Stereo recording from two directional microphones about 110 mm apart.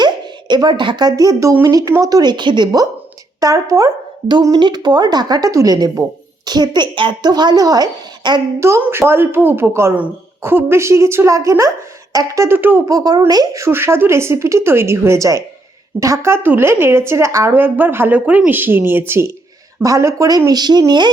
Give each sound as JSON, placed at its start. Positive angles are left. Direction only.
{"t": 0.0, "sound": "speech", "side_deg": -40}
{"t": 3.4, "sound": "speech", "side_deg": -30}
{"t": 4.6, "sound": "speech", "side_deg": -40}
{"t": 8.6, "sound": "speech", "side_deg": -25}
{"t": 12.9, "sound": "speech", "side_deg": -35}